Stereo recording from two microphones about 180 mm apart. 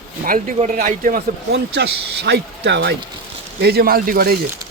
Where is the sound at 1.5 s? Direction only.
70° right (ahead or behind).